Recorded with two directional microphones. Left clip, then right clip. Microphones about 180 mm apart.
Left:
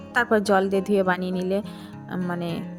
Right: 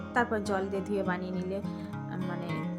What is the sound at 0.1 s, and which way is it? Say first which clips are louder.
A woman's voice: left 9 dB; 45° left (ahead or behind).